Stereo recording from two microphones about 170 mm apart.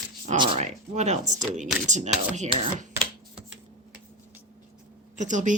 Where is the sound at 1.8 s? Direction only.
45° right (ahead or behind).